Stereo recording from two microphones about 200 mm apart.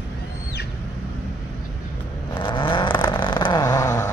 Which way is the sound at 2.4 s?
25° left (ahead or behind).